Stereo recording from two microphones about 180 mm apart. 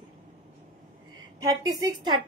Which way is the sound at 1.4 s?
20° right (ahead or behind).